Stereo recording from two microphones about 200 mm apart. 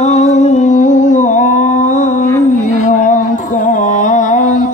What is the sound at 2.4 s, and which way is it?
Music, 40° left (ahead or behind).